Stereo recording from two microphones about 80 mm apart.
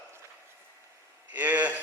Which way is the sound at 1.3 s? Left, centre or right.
Right.